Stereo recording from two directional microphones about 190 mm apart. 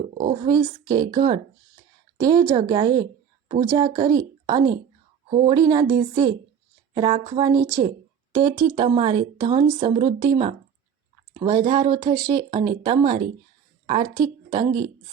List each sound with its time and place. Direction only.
0.2 s speech: 20° right (ahead or behind)
13.0 s speech: 35° right (ahead or behind)
14.1 s speech: 25° right (ahead or behind)